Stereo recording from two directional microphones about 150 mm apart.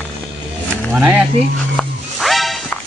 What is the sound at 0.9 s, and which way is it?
Speech, 5° right (ahead or behind).